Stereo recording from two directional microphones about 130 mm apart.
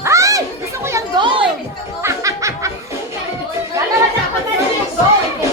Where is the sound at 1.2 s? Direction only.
40° right (ahead or behind).